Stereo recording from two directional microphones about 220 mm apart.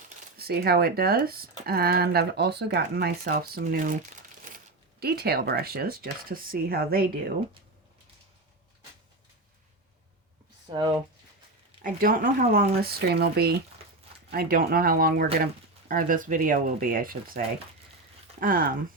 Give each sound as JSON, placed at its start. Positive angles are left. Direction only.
{"t": 0.3, "sound": "speech", "side_deg": -45}
{"t": 10.7, "sound": "speech", "side_deg": -20}
{"t": 11.8, "sound": "speech", "side_deg": -40}